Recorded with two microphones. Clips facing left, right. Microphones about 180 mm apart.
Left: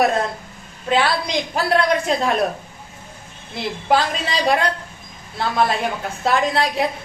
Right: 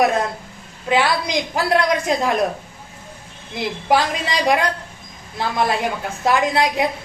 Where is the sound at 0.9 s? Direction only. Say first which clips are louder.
Even; 15° right (ahead or behind).